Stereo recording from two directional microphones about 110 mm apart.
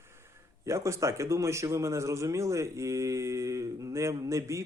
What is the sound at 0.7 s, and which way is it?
Speech, 25° right (ahead or behind).